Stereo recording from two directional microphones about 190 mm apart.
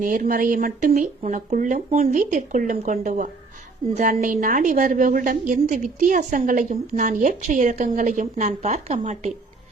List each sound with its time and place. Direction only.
0.0 s a woman's voice: 45° right (ahead or behind)